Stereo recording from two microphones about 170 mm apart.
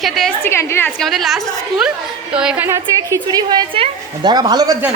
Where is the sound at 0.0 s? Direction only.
Centre (ahead or behind).